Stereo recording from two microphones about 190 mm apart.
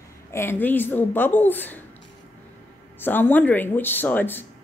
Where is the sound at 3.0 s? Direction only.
10° left (ahead or behind).